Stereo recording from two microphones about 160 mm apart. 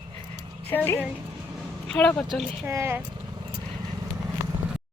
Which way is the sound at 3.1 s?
25° right (ahead or behind).